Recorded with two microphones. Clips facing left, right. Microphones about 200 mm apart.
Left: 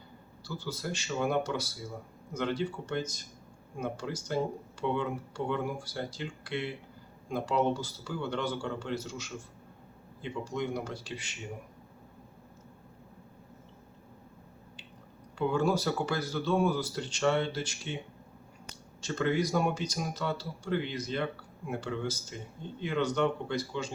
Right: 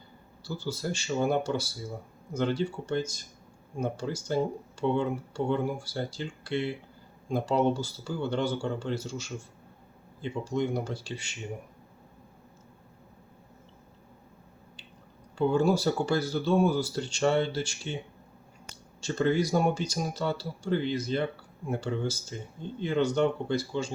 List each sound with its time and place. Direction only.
0.4 s speech: 30° right (ahead or behind)
10.4 s speech: 30° right (ahead or behind)
15.4 s speech: 30° right (ahead or behind)